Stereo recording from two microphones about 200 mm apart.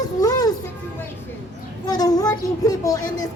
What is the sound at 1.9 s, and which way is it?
A woman's voice, 20° left (ahead or behind).